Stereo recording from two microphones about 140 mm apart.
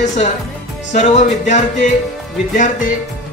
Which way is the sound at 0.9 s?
55° left (ahead or behind).